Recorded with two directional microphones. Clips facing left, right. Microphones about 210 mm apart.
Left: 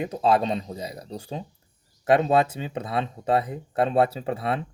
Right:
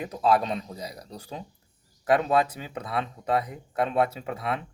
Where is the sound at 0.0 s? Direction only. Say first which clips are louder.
Left 2 dB; 25° left (ahead or behind).